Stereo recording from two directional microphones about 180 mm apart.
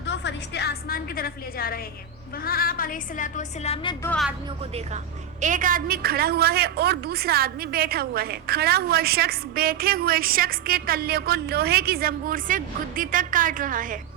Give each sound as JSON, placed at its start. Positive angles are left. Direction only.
{"t": 0.0, "sound": "music", "side_deg": 80}
{"t": 2.4, "sound": "a woman's voice", "side_deg": 55}
{"t": 5.4, "sound": "a woman's voice", "side_deg": -45}